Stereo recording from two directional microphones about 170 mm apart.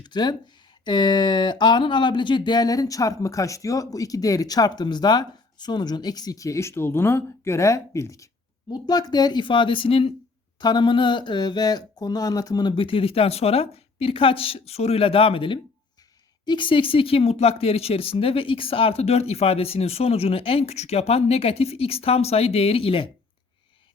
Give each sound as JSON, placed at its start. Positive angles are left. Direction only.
{"t": 0.0, "sound": "speech", "side_deg": 25}